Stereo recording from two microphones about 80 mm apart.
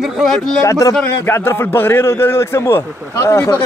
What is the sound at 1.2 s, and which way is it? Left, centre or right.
Speech, left.